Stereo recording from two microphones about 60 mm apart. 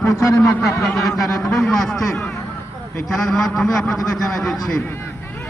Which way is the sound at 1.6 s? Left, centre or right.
Centre.